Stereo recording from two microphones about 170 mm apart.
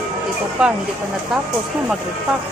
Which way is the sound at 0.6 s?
5° right (ahead or behind).